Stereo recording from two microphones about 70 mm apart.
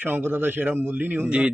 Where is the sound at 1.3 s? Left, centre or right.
Centre.